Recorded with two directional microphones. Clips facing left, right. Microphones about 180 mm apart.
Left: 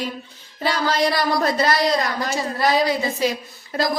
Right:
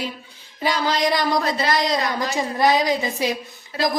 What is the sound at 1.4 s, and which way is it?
Speech, 45° left (ahead or behind).